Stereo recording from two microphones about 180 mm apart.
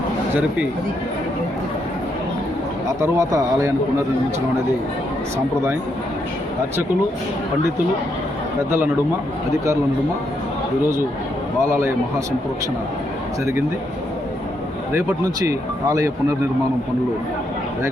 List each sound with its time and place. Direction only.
3.0 s speech: 15° right (ahead or behind)
11.6 s speech: 15° right (ahead or behind)
13.4 s speech: 15° right (ahead or behind)
14.9 s speech: 15° right (ahead or behind)